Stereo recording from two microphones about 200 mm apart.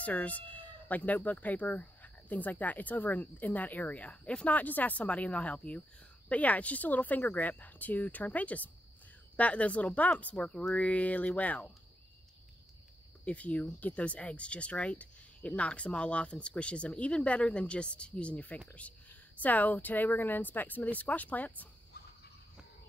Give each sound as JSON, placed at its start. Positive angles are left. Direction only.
{"t": 0.0, "sound": "speech", "side_deg": 5}
{"t": 13.2, "sound": "speech", "side_deg": 5}
{"t": 21.9, "sound": "cricket", "side_deg": 50}